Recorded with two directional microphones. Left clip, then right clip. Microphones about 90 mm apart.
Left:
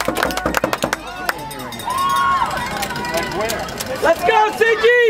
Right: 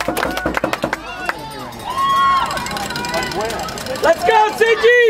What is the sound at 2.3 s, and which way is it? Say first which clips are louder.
Vehicle: right 1 dB; 25° right (ahead or behind).